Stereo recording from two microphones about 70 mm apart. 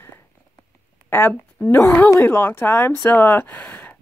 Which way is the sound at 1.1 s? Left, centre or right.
Left.